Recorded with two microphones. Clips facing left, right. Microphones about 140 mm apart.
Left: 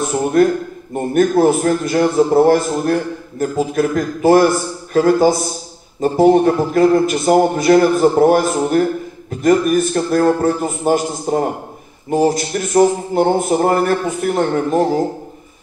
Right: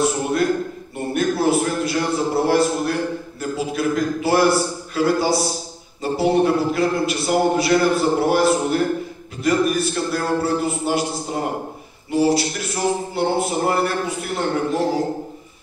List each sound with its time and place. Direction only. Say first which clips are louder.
0.4 s a man's voice: left 7 dB; 45° left (ahead or behind)